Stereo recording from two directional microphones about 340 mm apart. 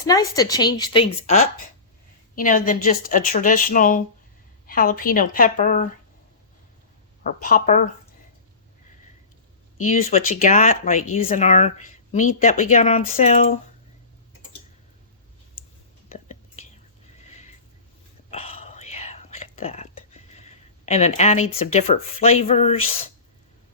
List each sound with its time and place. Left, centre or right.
0.1 s a woman's voice: centre
7.3 s a woman's voice: left
9.8 s a woman's voice: centre
16.0 s whispering: centre
18.3 s whispering: centre
21.6 s a woman's voice: centre